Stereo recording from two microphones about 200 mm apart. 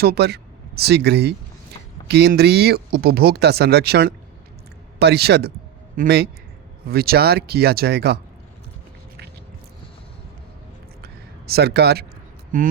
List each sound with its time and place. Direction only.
0.0 s speech: 55° right (ahead or behind)
11.0 s a sound: 50° right (ahead or behind)
12.5 s speech: 45° right (ahead or behind)